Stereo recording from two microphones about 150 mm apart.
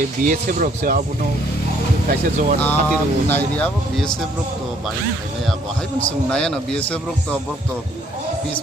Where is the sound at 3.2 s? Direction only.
15° left (ahead or behind).